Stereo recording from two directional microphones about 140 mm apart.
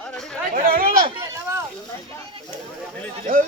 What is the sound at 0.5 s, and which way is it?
Chatter, 90° right.